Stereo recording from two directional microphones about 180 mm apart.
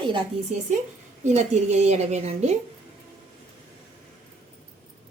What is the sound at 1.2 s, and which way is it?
A woman's voice, 40° right (ahead or behind).